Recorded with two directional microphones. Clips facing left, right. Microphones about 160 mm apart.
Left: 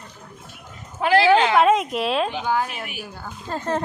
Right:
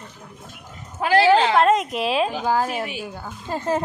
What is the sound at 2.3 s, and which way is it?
A woman's voice, 40° right (ahead or behind).